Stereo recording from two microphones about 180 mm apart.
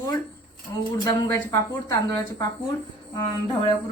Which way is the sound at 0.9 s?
20° left (ahead or behind).